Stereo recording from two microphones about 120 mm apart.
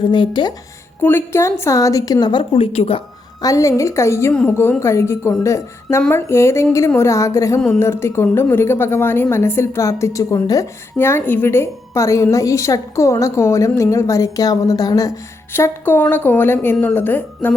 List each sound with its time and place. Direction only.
0.0 s speech: 40° left (ahead or behind)
1.0 s a woman's voice: 20° left (ahead or behind); by 3.0 s 55° left (ahead or behind)
3.4 s a woman's voice: 30° left (ahead or behind)